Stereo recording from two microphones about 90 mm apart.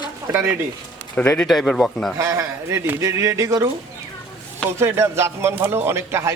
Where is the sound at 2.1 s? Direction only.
35° right (ahead or behind).